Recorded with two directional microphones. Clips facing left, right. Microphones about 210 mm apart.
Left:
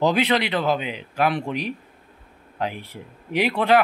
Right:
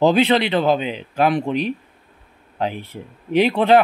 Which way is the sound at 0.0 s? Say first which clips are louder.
Right 5 dB; 25° right (ahead or behind).